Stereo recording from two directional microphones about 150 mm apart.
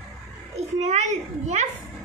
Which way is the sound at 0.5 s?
50° right (ahead or behind).